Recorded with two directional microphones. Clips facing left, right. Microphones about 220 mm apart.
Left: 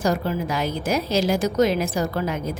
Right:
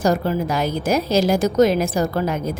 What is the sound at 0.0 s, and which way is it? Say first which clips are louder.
A woman's voice: right 4 dB; 40° right (ahead or behind).